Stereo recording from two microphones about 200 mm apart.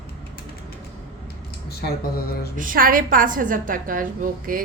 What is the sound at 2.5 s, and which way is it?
A woman's voice, 45° right (ahead or behind).